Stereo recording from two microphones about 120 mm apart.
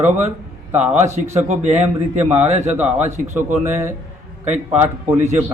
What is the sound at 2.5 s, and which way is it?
Speech, 70° right (ahead or behind).